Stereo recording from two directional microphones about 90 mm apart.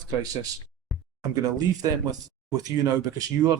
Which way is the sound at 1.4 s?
45° right (ahead or behind).